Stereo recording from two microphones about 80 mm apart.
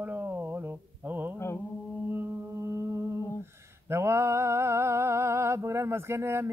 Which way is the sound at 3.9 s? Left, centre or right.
Right.